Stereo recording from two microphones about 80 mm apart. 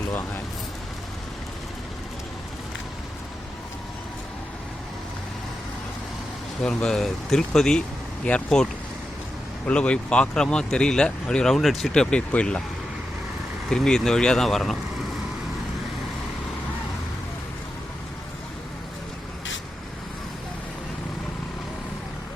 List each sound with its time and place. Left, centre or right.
0.1 s a sound: left
6.7 s speech: centre
9.6 s speech: centre
13.7 s speech: centre